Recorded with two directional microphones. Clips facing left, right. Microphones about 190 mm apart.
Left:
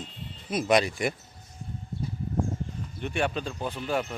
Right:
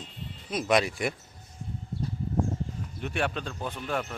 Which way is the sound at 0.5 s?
Centre (ahead or behind).